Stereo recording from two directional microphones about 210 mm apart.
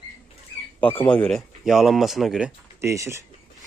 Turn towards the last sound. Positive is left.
turn(degrees=-15)  # may be behind; listen again after turning